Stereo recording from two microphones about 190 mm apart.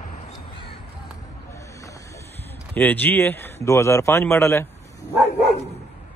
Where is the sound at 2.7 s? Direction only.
10° left (ahead or behind).